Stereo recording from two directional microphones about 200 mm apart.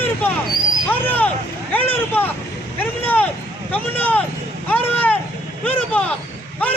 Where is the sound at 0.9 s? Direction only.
10° left (ahead or behind).